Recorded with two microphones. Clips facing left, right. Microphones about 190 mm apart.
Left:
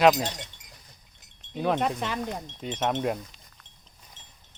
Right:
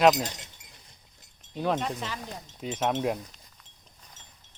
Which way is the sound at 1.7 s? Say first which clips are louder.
Left 4 dB; 60° left (ahead or behind).